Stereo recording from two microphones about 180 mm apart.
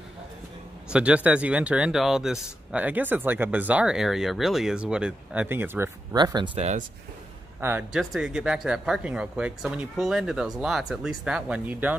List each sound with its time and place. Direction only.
0.8 s speech: 5° right (ahead or behind)
6.1 s speech: 25° right (ahead or behind)
7.9 s speech: centre (ahead or behind)